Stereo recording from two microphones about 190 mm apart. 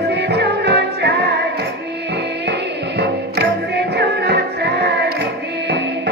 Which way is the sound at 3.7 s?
60° right (ahead or behind).